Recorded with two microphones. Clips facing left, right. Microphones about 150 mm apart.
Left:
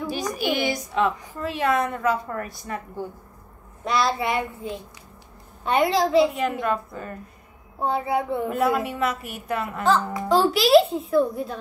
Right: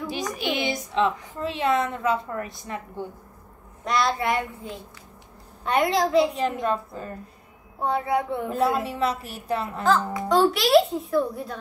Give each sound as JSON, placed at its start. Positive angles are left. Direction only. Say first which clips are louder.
{"t": 0.2, "sound": "a child's voice", "louder": "left 3 dB", "side_deg": 0}
{"t": 0.5, "sound": "a woman's voice", "louder": "left 2 dB", "side_deg": -20}
{"t": 3.8, "sound": "a child's voice", "louder": "left 1 dB", "side_deg": 0}
{"t": 6.3, "sound": "a woman's voice", "louder": "even", "side_deg": -30}
{"t": 7.8, "sound": "a child's voice", "louder": "even", "side_deg": 0}
{"t": 8.5, "sound": "a woman's voice", "louder": "left 1 dB", "side_deg": -30}
{"t": 10.2, "sound": "a child's voice", "louder": "left 1 dB", "side_deg": 0}